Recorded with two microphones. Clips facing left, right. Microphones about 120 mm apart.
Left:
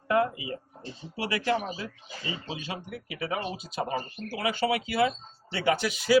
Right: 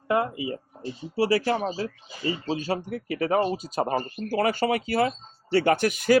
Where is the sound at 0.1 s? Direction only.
30° right (ahead or behind).